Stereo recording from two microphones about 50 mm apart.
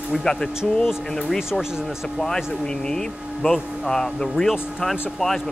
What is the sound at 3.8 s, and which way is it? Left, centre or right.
Speech, centre.